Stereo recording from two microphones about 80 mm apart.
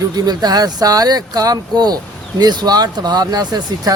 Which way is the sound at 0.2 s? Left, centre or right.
Right.